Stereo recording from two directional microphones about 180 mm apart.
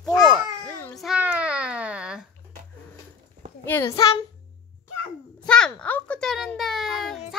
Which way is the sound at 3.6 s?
10° left (ahead or behind).